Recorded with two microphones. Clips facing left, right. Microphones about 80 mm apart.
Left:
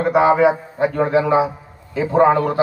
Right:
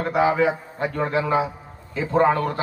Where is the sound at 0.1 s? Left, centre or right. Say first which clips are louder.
Left 6 dB; left.